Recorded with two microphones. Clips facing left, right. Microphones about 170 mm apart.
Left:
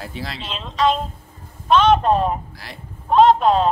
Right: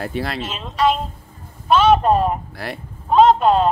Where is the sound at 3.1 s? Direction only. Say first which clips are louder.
Right 1 dB; centre (ahead or behind).